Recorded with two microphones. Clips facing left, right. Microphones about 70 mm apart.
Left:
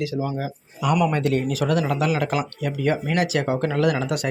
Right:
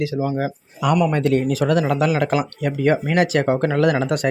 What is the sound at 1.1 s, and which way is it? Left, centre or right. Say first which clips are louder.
Speech: right 4 dB; right.